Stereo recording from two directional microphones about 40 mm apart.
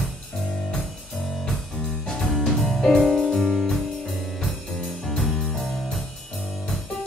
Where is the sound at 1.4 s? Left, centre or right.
Centre.